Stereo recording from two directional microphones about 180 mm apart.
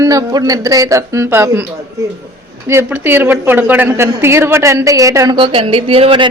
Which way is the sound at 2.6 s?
10° right (ahead or behind).